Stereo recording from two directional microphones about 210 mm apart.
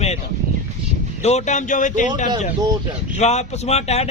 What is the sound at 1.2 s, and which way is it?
Speech, 30° left (ahead or behind).